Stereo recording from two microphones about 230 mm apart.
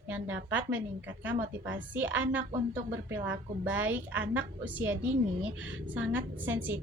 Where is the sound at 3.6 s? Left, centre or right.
Centre.